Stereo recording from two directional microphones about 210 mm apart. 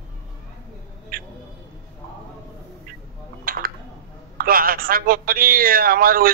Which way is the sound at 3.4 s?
45° right (ahead or behind).